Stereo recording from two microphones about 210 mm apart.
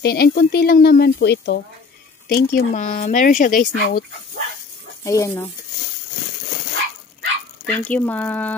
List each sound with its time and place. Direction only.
0.0 s speech: 50° left (ahead or behind)
5.0 s speech: 15° left (ahead or behind)
7.6 s speech: 5° left (ahead or behind)